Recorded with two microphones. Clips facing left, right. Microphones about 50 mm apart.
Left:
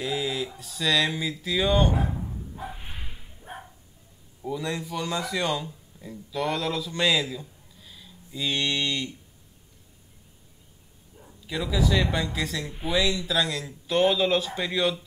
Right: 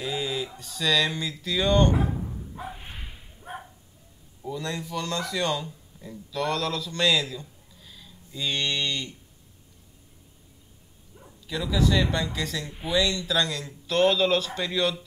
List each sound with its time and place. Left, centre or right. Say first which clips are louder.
0.0 s speech: left 1 dB; centre
2.6 s whip: even; centre
4.4 s speech: left 2 dB; centre
11.4 s speech: right 1 dB; centre